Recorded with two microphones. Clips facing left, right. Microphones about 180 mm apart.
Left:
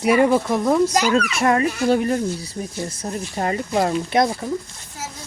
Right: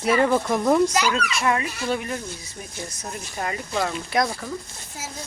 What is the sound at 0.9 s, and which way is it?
A child's voice, 45° left (ahead or behind).